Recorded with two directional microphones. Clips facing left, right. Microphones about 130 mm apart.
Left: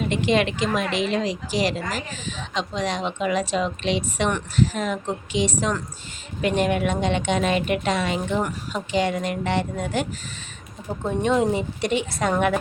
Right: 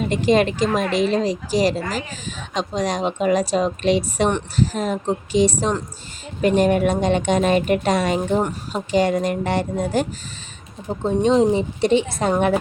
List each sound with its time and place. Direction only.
0.1 s speech: 40° right (ahead or behind)
10.8 s speech: 25° right (ahead or behind)